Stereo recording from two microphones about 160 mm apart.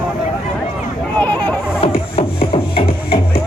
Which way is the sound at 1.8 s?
35° left (ahead or behind).